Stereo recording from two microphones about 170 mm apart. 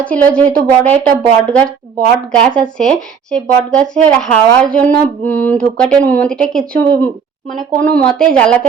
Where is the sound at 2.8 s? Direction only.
5° left (ahead or behind).